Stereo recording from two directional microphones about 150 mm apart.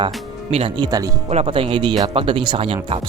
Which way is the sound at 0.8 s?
25° right (ahead or behind).